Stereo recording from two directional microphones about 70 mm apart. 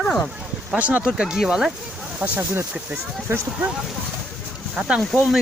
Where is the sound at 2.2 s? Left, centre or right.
Right.